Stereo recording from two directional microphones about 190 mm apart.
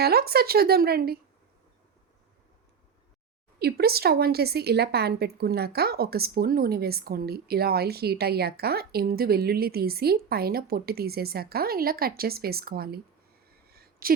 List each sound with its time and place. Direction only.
0.0 s a woman's voice: 55° right (ahead or behind)
3.6 s a woman's voice: 55° right (ahead or behind)
13.7 s a sound: 55° right (ahead or behind)